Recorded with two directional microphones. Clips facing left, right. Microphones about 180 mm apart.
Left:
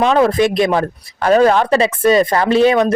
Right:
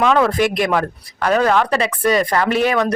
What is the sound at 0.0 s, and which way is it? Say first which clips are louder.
Speech: left 3 dB; 25° left (ahead or behind).